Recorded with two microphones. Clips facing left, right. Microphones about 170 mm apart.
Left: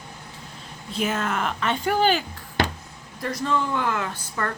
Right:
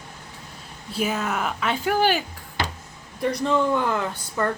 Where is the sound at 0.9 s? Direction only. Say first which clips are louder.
Even; 5° right (ahead or behind).